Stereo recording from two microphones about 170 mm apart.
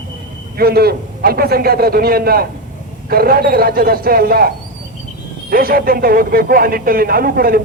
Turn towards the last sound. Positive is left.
turn(degrees=-60)  # may be behind; listen again after turning